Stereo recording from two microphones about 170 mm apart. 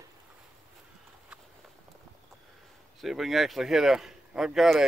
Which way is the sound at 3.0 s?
Centre (ahead or behind).